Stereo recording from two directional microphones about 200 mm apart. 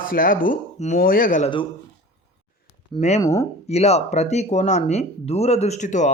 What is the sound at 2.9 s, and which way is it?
Speech, 35° left (ahead or behind).